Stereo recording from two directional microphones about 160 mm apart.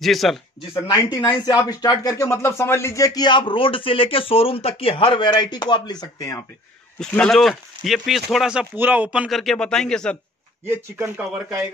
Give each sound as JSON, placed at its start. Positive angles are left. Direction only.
{"t": 0.0, "sound": "speech", "side_deg": 0}
{"t": 0.7, "sound": "speech", "side_deg": 25}
{"t": 7.0, "sound": "speech", "side_deg": 5}
{"t": 10.7, "sound": "speech", "side_deg": -15}